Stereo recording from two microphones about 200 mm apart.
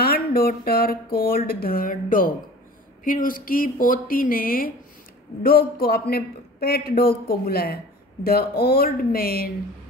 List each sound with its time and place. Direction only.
0.0 s a man's voice: 50° left (ahead or behind)